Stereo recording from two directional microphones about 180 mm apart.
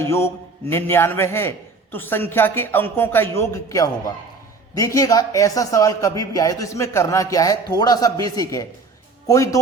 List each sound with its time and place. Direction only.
0.0 s a man's voice: 15° left (ahead or behind)